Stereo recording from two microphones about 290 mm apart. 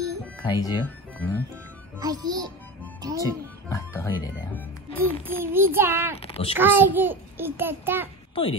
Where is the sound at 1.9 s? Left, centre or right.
Centre.